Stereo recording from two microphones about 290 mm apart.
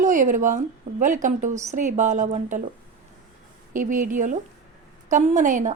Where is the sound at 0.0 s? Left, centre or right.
Right.